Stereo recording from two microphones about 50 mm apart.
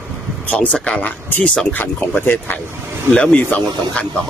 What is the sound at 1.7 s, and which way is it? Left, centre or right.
Speech, left.